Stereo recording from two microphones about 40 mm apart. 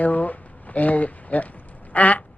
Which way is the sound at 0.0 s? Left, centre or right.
Left.